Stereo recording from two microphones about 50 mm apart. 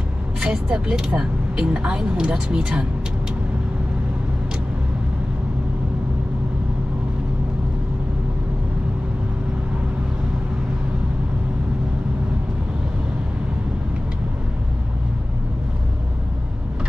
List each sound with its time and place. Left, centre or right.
0.4 s speech: centre